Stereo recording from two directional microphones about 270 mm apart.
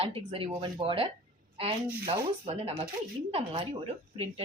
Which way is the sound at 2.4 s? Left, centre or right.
Right.